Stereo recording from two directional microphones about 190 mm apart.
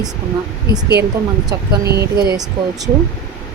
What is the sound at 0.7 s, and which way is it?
Speech, 60° right (ahead or behind).